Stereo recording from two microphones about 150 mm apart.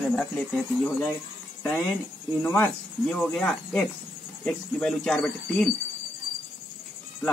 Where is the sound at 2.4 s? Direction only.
10° left (ahead or behind).